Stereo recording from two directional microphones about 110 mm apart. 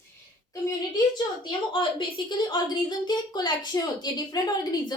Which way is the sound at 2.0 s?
45° left (ahead or behind).